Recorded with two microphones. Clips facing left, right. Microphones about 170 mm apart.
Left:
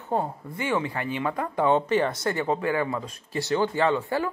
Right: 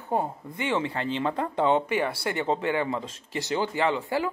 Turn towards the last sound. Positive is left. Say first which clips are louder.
# left 2 dB
turn(degrees=-15)  # may be behind; listen again after turning